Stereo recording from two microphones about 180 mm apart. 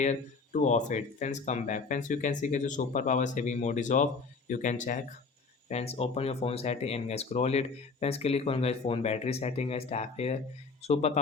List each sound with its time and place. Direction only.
0.0 s speech: 40° left (ahead or behind)